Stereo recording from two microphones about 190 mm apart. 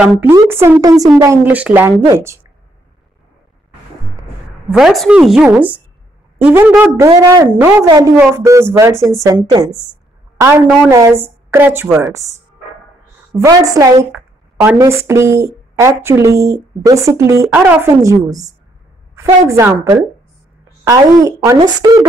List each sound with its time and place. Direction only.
0.2 s a woman's voice: 15° right (ahead or behind)
4.2 s a woman's voice: 5° right (ahead or behind)
13.3 s a woman's voice: 20° right (ahead or behind)